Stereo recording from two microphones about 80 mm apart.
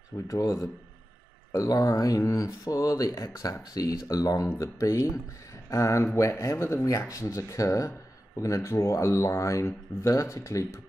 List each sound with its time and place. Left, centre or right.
0.3 s speech: left
1.7 s speech: left